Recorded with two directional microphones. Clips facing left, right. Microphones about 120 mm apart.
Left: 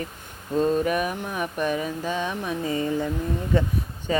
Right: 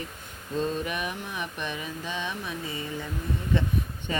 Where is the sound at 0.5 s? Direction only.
45° left (ahead or behind).